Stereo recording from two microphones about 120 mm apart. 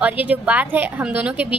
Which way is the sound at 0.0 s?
15° right (ahead or behind).